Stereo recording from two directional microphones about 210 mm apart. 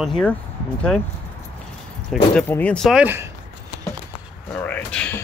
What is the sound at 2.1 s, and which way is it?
Speech, 5° left (ahead or behind).